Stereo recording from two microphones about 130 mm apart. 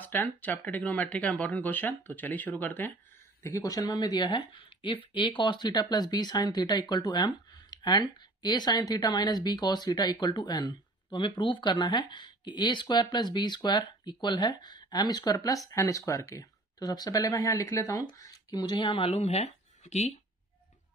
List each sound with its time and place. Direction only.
0.0 s speech: 15° left (ahead or behind)
3.4 s speech: 25° left (ahead or behind); by 20.2 s 60° left (ahead or behind)